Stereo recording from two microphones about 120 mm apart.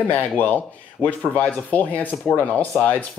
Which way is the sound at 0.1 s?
15° left (ahead or behind).